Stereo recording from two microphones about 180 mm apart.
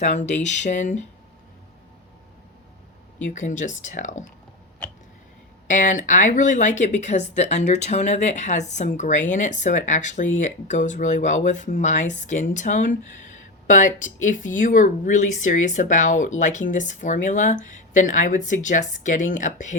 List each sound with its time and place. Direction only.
0.0 s speech: 40° left (ahead or behind)
3.3 s speech: 45° left (ahead or behind)
5.6 s speech: 45° left (ahead or behind)